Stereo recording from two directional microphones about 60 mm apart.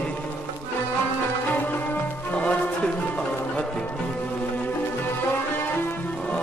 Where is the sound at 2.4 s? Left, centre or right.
Centre.